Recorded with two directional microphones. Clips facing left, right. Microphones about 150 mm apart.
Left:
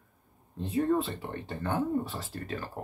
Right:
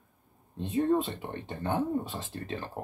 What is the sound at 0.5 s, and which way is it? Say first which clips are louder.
Speech: right 1 dB; 20° right (ahead or behind).